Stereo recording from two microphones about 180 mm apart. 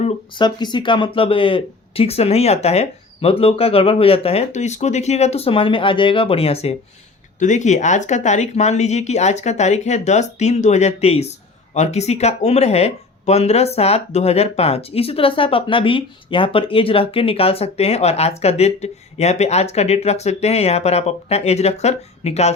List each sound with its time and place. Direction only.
0.0 s speech: 25° left (ahead or behind)